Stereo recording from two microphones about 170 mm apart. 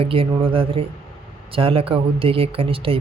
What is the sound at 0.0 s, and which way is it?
Speech, 35° right (ahead or behind).